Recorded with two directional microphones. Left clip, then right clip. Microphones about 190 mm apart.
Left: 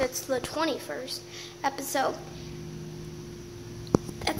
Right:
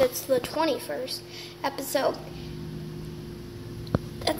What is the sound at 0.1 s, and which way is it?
A woman's voice, 15° left (ahead or behind).